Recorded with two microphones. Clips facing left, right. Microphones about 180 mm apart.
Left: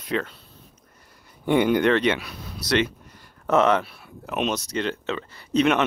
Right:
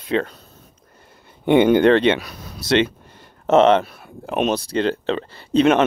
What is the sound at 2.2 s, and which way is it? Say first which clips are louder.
Speech: right 3 dB; 40° right (ahead or behind).